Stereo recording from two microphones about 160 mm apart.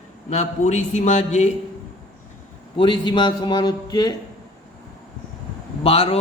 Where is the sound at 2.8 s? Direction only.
30° left (ahead or behind).